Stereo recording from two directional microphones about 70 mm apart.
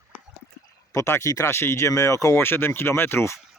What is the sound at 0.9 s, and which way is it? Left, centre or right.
Speech, left.